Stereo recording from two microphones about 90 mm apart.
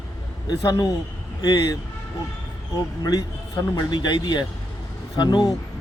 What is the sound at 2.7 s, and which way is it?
Speech, 45° left (ahead or behind).